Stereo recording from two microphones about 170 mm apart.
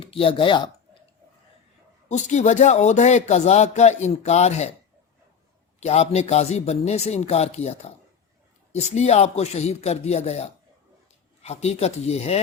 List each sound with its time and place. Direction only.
0.0 s a man's voice: 30° left (ahead or behind)
2.0 s a man's voice: 45° left (ahead or behind)
5.8 s a man's voice: 40° left (ahead or behind)